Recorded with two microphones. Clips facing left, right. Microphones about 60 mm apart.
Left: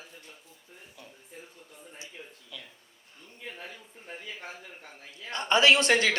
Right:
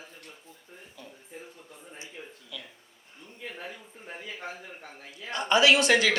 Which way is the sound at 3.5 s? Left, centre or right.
Centre.